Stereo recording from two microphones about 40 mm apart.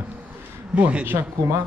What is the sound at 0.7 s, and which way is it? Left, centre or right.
Speech, right.